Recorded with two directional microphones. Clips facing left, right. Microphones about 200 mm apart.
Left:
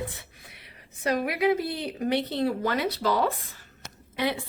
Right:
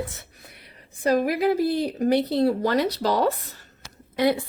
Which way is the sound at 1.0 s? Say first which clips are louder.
Right 4 dB; 35° right (ahead or behind).